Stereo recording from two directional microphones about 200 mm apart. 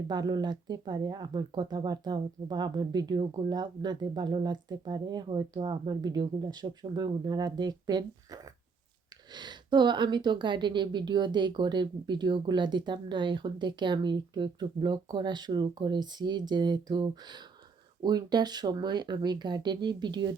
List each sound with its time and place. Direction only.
0.1 s speech: 20° right (ahead or behind)